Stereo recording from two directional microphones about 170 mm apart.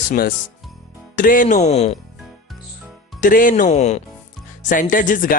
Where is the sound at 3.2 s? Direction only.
55° left (ahead or behind).